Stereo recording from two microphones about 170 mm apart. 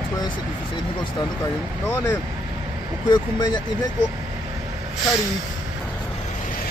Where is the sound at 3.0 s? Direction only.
25° left (ahead or behind).